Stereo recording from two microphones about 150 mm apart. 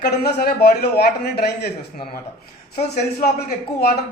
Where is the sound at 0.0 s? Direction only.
90° left.